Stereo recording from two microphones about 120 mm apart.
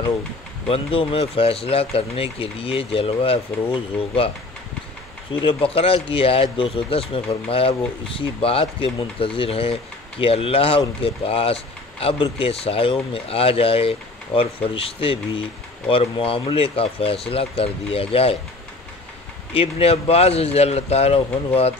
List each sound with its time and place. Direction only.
0.7 s speech: 50° left (ahead or behind)
5.4 s speech: 45° left (ahead or behind)
19.5 s speech: 55° left (ahead or behind)